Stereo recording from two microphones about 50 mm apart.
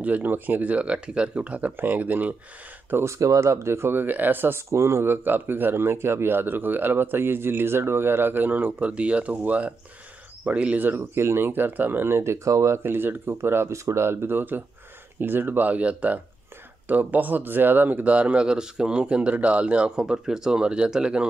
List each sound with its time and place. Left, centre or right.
0.0 s speech: right
3.1 s speech: right
4.6 s speech: right
11.0 s speech: right
12.8 s speech: right
13.4 s speech: right
20.0 s speech: centre